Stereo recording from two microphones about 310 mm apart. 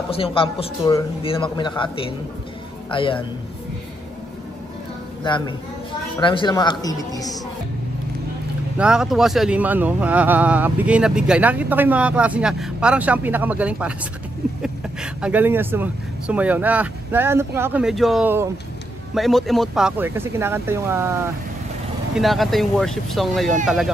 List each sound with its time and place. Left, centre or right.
0.1 s a man's voice: centre
5.2 s a man's voice: centre
8.7 s speech: centre
22.1 s speech: centre